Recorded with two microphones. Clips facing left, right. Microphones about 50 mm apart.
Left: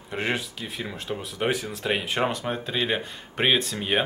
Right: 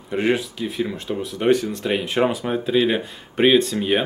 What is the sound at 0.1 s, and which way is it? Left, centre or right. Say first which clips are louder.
Speech: right 7 dB; centre.